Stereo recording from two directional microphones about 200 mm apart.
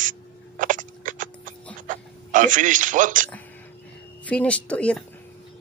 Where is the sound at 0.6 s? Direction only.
40° right (ahead or behind).